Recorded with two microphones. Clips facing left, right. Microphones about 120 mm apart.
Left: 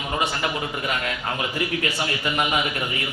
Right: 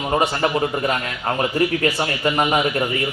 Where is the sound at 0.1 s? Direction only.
40° right (ahead or behind).